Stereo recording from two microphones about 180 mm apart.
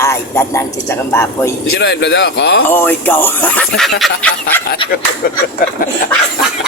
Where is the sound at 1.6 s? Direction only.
65° left (ahead or behind).